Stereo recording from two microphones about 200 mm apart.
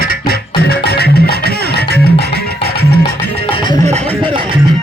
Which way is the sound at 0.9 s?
50° left (ahead or behind).